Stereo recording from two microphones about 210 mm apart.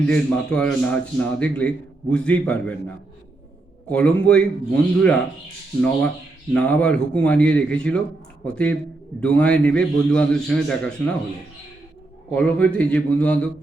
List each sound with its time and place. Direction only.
0.1 s a man's voice: 5° left (ahead or behind)
6.5 s a man's voice: 5° left (ahead or behind)
12.3 s a man's voice: 5° left (ahead or behind)